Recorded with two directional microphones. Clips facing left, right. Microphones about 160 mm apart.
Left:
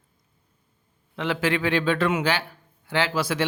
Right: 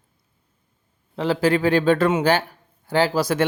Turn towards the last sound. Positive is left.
turn(degrees=-40)  # may be behind; listen again after turning